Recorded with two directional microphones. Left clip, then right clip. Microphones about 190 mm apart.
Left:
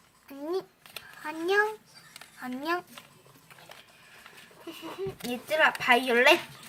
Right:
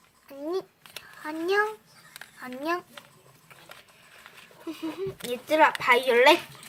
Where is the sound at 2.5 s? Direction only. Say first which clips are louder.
Right 1 dB; centre (ahead or behind).